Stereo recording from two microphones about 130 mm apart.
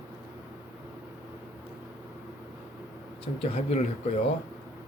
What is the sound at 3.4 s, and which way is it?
Speech, 55° left (ahead or behind).